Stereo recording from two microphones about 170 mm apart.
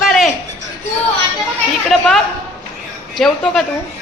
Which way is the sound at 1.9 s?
Centre (ahead or behind).